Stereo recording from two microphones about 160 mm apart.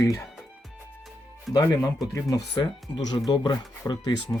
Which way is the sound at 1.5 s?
20° left (ahead or behind).